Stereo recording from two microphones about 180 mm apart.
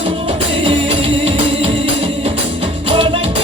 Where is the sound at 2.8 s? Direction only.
30° right (ahead or behind).